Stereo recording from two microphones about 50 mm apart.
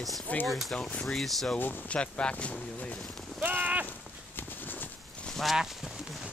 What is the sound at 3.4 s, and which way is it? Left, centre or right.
Speech, right.